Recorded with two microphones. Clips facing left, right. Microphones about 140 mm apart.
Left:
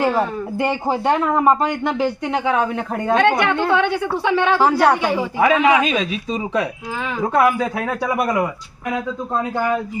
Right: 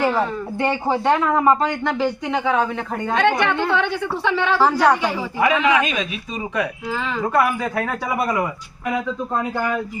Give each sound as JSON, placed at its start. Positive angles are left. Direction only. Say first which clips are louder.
{"t": 0.1, "sound": "speech", "louder": "left 1 dB", "side_deg": 10}
{"t": 7.2, "sound": "speech", "louder": "left 3 dB", "side_deg": 15}